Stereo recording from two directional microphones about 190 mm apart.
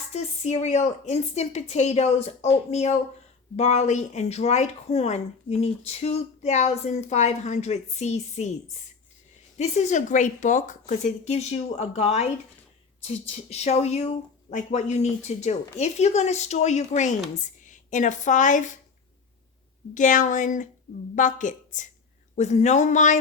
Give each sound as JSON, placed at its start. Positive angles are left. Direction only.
{"t": 0.1, "sound": "speech", "side_deg": 35}
{"t": 9.6, "sound": "speech", "side_deg": 35}
{"t": 19.9, "sound": "speech", "side_deg": 40}